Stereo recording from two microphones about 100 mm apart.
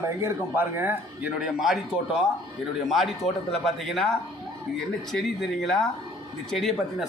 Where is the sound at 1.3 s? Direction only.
5° right (ahead or behind).